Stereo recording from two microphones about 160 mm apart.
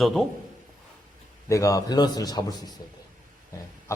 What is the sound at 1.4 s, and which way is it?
A man's voice, 20° left (ahead or behind).